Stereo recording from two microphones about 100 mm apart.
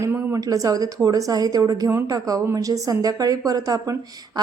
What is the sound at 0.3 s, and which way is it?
A woman's voice, 35° right (ahead or behind).